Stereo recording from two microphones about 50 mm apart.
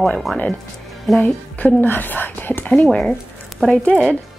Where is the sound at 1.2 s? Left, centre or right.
Left.